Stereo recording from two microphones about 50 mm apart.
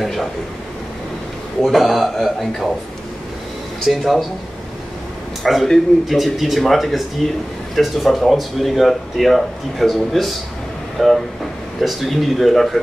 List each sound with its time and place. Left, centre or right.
0.0 s speech: centre
1.6 s speech: centre
3.8 s speech: centre
5.4 s speech: centre